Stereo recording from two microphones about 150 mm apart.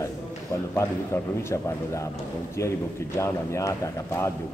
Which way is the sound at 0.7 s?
20° left (ahead or behind).